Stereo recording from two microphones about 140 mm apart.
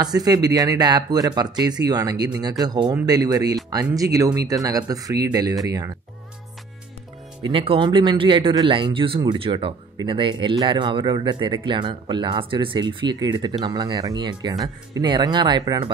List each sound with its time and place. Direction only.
0.0 s speech: 25° right (ahead or behind)
7.4 s speech: 40° right (ahead or behind)